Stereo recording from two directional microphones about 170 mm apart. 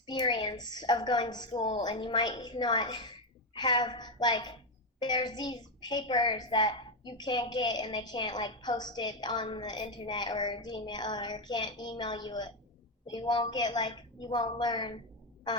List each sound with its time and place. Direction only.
0.0 s a woman's voice: 25° left (ahead or behind)